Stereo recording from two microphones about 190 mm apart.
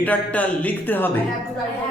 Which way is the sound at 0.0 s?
10° left (ahead or behind).